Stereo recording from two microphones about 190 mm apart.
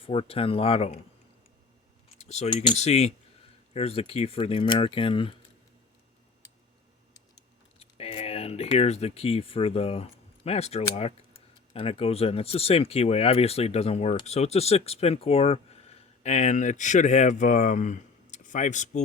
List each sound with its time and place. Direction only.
0.0 s speech: 30° left (ahead or behind)
2.1 s speech: 35° left (ahead or behind)
7.8 s speech: 30° left (ahead or behind)